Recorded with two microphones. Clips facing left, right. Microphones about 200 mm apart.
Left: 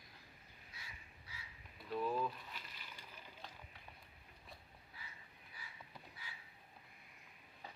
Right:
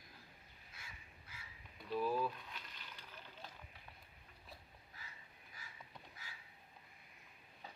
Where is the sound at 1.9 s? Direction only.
5° right (ahead or behind).